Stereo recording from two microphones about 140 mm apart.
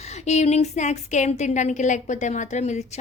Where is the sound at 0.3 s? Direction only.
50° left (ahead or behind).